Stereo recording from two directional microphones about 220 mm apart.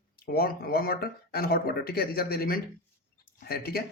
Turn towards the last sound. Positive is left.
turn(degrees=45)  # may be behind; listen again after turning